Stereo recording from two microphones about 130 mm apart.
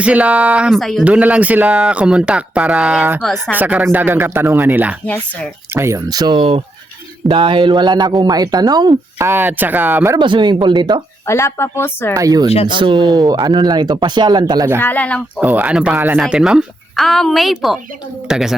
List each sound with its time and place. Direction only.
0.0 s speech: 10° right (ahead or behind)
0.8 s speech: centre (ahead or behind)
1.0 s speech: 10° right (ahead or behind)
5.0 s speech: 10° left (ahead or behind)
5.7 s speech: 20° right (ahead or behind)
9.1 s speech: 20° right (ahead or behind)
10.2 s speech: 35° right (ahead or behind)
11.3 s speech: 20° left (ahead or behind)
12.1 s speech: 30° right (ahead or behind)
14.8 s speech: 15° left (ahead or behind)
15.4 s speech: 10° right (ahead or behind)
16.2 s speech: 5° right (ahead or behind)